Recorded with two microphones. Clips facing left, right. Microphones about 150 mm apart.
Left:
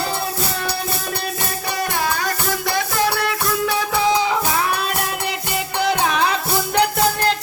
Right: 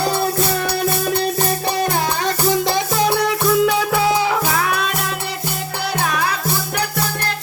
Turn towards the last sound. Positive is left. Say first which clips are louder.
# left 3 dB
turn(degrees=20)  # may be behind; listen again after turning